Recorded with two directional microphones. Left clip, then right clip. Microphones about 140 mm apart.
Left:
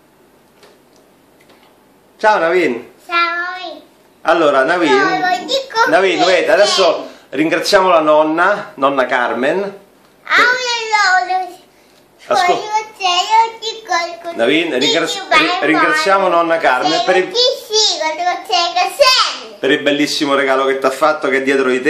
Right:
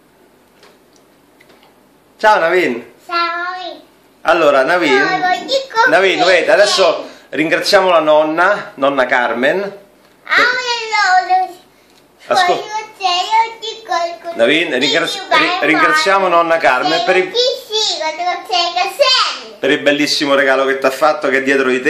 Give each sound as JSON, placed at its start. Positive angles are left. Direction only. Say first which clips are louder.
{"t": 2.1, "sound": "a sound", "louder": "right 1 dB", "side_deg": 0}
{"t": 4.2, "sound": "a child's voice", "louder": "right 1 dB", "side_deg": 0}
{"t": 10.2, "sound": "a sound", "louder": "left 1 dB", "side_deg": 0}
{"t": 12.3, "sound": "a child's voice", "louder": "even", "side_deg": 0}
{"t": 13.0, "sound": "child singing", "louder": "left 1 dB", "side_deg": 10}
{"t": 14.3, "sound": "a child's voice", "louder": "right 1 dB", "side_deg": -5}
{"t": 19.6, "sound": "a child's voice", "louder": "right 1 dB", "side_deg": -5}